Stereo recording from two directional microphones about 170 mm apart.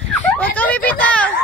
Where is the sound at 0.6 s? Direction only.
10° left (ahead or behind).